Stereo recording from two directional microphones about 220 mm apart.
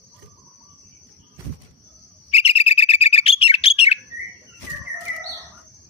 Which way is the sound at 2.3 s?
25° left (ahead or behind).